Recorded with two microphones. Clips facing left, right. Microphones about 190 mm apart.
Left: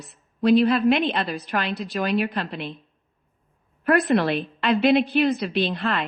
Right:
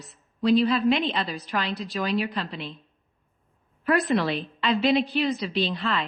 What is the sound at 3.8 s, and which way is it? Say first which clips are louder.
A woman's voice: left 3 dB; 60° left (ahead or behind).